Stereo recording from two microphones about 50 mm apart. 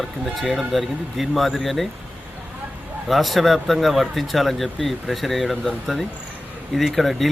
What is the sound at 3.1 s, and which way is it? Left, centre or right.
Speech, centre.